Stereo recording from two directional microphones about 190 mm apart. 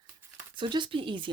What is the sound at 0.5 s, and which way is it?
Speech, 25° right (ahead or behind).